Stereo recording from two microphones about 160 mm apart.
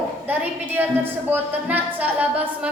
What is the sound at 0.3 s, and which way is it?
A woman's voice, 10° right (ahead or behind).